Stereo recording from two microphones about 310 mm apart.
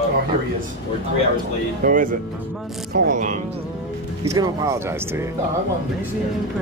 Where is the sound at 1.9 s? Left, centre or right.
Right.